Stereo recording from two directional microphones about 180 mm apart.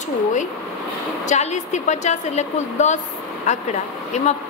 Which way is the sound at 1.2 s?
40° left (ahead or behind).